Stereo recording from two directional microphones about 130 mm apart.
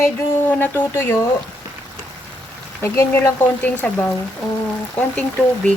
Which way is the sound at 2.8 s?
20° left (ahead or behind).